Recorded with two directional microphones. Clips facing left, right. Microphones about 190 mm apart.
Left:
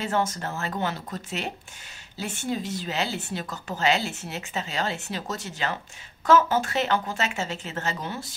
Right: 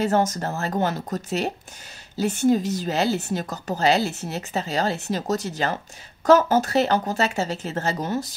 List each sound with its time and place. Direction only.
0.0 s speech: 40° right (ahead or behind)